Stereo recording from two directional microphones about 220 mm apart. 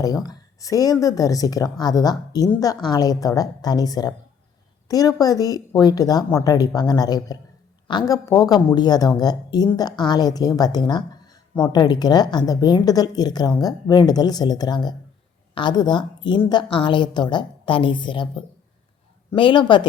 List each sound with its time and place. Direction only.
0.0 s a woman's voice: 15° left (ahead or behind)